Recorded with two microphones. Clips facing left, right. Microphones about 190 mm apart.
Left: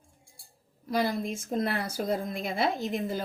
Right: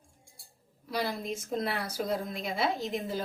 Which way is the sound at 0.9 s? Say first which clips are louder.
Left 4 dB; 50° left (ahead or behind).